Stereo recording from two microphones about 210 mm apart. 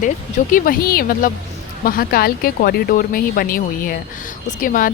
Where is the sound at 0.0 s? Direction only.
40° left (ahead or behind).